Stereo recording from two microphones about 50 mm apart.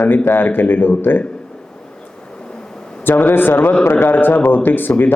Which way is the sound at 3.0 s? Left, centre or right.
Left.